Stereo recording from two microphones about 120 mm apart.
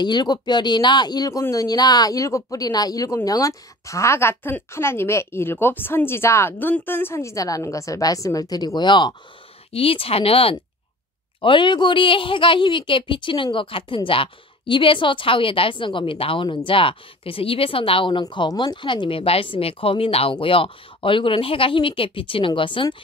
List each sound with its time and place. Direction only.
0.0 s a woman's voice: 35° left (ahead or behind)
9.7 s speech: 50° left (ahead or behind)
18.2 s speech: 35° left (ahead or behind)